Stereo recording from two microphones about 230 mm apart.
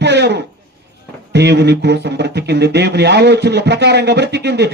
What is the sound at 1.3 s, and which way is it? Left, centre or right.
Speech, right.